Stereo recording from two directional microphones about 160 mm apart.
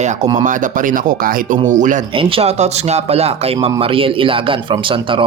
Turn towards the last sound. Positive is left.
turn(degrees=-30)  # may be behind; listen again after turning